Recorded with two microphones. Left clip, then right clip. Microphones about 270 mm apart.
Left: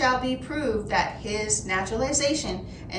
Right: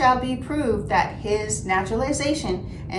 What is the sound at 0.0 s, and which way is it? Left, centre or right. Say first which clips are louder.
A woman's voice: right 4 dB; centre.